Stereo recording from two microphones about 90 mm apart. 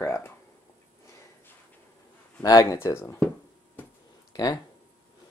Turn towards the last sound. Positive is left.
turn(degrees=40)  # may be behind; listen again after turning